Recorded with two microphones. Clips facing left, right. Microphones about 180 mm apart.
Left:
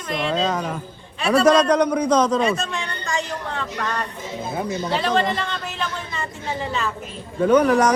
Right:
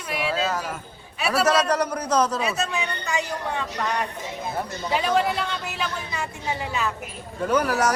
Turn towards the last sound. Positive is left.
turn(degrees=-5)  # may be behind; listen again after turning